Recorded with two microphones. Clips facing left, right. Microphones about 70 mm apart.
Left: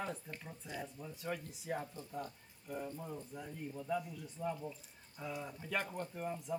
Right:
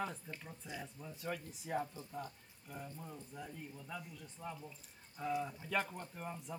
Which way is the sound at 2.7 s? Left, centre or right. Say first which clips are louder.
Left 6 dB; centre.